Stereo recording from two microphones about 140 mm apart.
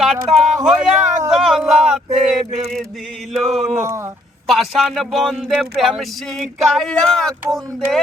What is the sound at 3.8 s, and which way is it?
Speech, 20° right (ahead or behind).